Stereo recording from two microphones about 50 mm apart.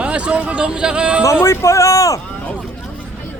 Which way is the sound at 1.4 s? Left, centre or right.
Left.